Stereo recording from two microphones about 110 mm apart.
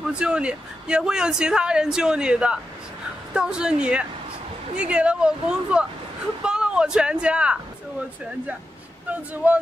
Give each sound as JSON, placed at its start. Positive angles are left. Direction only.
{"t": 0.0, "sound": "a man's voice", "side_deg": -10}
{"t": 9.1, "sound": "a man's voice", "side_deg": -15}